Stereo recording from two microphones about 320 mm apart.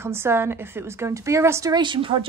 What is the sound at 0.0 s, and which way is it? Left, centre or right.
A woman's voice, centre.